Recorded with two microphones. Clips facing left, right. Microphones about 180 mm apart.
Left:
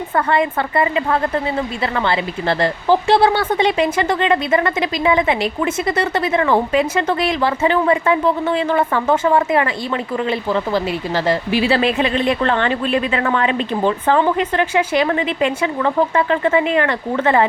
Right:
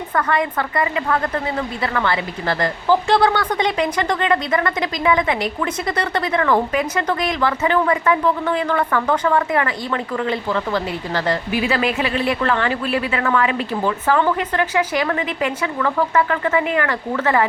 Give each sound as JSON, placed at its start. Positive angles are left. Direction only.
{"t": 0.1, "sound": "a woman's voice", "side_deg": 25}